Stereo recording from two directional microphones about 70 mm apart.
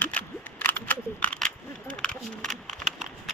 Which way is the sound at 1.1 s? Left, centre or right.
Centre.